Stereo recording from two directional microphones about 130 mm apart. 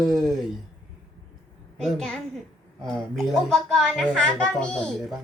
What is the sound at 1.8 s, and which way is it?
Speech, 5° left (ahead or behind).